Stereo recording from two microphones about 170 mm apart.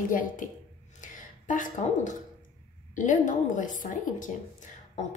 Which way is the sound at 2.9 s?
50° left (ahead or behind).